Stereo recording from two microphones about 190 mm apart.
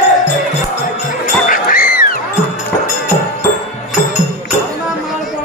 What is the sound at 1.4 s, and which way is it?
Music, 45° left (ahead or behind).